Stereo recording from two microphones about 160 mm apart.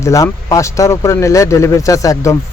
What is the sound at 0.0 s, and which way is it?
Speech, 20° left (ahead or behind).